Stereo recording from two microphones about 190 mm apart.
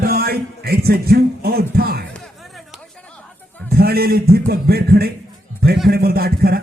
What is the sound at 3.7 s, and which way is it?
A man's voice, 55° right (ahead or behind).